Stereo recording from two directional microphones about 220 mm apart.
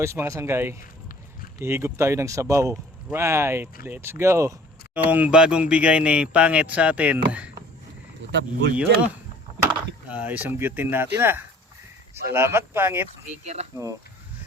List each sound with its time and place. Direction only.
0.0 s speech: 15° right (ahead or behind)
8.3 s speech: 50° right (ahead or behind)
8.7 s speech: 5° right (ahead or behind)
10.1 s speech: 5° right (ahead or behind)
13.4 s speech: 30° right (ahead or behind)